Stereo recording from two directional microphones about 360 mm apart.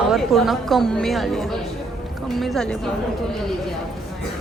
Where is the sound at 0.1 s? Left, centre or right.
Centre.